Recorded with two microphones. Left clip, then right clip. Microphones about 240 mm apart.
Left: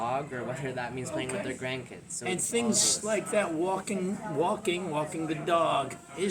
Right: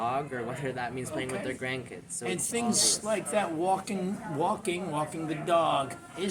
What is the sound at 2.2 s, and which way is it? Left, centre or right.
Speech, centre.